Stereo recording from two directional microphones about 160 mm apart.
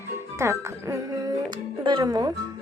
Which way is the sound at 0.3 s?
15° right (ahead or behind).